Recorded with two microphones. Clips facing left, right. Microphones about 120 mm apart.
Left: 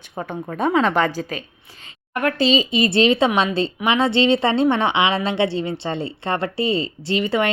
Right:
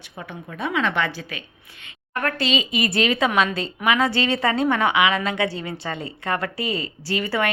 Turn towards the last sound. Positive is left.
turn(degrees=25)  # may be behind; listen again after turning